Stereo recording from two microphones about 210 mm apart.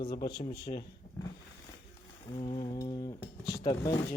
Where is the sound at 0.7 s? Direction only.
30° left (ahead or behind).